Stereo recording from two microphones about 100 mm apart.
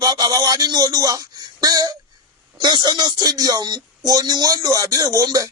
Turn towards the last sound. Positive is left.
turn(degrees=-35)  # may be behind; listen again after turning